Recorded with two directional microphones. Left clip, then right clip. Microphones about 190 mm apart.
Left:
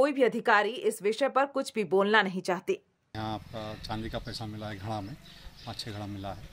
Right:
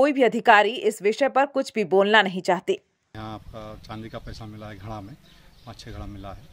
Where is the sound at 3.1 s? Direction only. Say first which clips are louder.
Left 1 dB; 5° right (ahead or behind).